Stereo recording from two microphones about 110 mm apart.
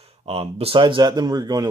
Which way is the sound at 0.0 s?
60° right (ahead or behind).